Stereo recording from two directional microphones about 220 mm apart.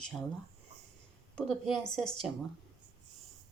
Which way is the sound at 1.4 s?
Centre (ahead or behind).